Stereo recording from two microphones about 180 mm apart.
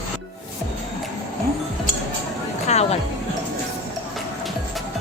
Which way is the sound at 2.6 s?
35° left (ahead or behind).